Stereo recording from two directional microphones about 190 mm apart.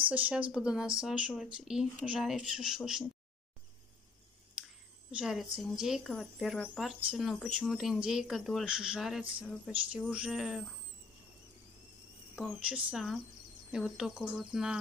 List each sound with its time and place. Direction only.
0.1 s speech: 5° right (ahead or behind)
5.1 s speech: 5° right (ahead or behind)
12.4 s speech: 5° right (ahead or behind)